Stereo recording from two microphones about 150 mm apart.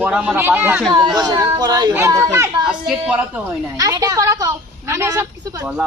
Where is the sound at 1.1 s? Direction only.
25° right (ahead or behind).